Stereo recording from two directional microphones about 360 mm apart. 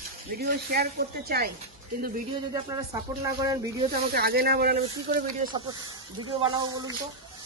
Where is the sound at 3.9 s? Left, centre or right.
Right.